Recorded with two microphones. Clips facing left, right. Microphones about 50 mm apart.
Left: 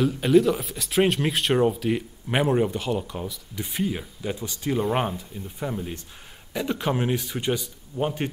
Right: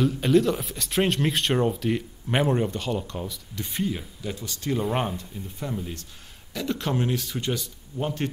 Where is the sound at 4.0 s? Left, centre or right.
Left.